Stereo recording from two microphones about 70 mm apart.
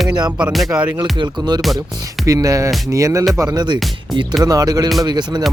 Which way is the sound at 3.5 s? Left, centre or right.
Right.